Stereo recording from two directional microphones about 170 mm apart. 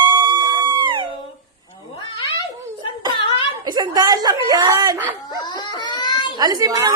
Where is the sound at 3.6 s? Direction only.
25° right (ahead or behind).